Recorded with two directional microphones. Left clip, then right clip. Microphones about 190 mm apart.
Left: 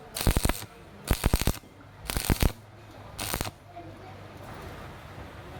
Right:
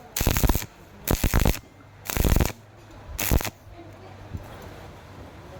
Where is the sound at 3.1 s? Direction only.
25° right (ahead or behind).